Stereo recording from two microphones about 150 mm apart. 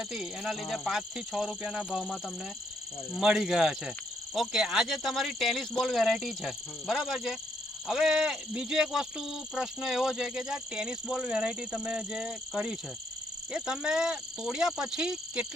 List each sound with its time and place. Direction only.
0.0 s speech: centre (ahead or behind)